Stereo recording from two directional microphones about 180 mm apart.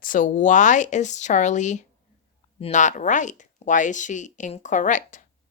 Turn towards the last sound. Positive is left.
turn(degrees=45)  # may be behind; listen again after turning